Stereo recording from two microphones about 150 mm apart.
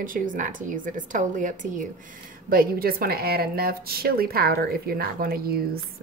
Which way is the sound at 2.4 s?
80° right.